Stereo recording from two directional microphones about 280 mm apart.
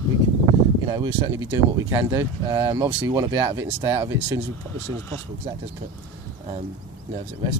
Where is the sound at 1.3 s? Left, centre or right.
Right.